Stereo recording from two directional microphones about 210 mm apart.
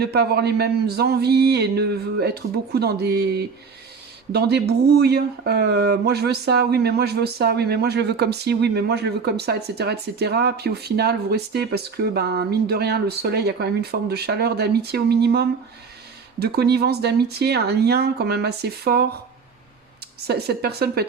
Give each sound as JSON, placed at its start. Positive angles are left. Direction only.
{"t": 0.0, "sound": "speech", "side_deg": -50}
{"t": 20.2, "sound": "speech", "side_deg": -50}